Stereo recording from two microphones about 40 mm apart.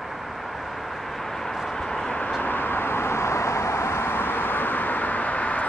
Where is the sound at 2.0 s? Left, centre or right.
Left.